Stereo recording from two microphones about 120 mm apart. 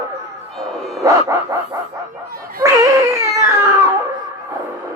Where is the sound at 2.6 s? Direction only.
30° right (ahead or behind).